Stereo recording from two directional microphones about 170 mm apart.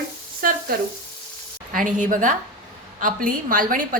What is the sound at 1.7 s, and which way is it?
A woman's voice, 50° right (ahead or behind).